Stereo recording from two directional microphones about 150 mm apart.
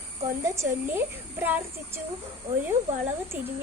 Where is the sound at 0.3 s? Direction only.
20° right (ahead or behind).